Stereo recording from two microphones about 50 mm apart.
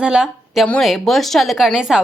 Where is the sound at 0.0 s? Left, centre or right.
Centre.